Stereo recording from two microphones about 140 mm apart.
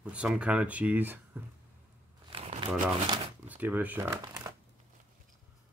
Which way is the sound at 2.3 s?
40° right (ahead or behind).